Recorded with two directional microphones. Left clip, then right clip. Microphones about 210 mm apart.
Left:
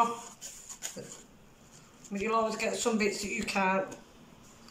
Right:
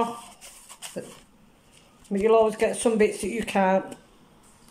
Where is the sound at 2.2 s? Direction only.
35° right (ahead or behind).